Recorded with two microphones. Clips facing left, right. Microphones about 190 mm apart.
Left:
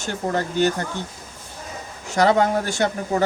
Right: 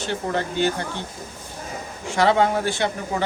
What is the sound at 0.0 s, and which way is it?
Speech, 45° left (ahead or behind).